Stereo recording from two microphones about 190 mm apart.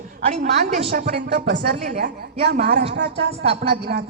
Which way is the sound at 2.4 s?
60° right (ahead or behind).